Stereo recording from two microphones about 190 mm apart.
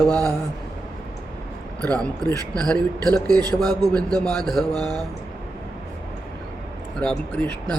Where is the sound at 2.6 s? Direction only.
5° left (ahead or behind).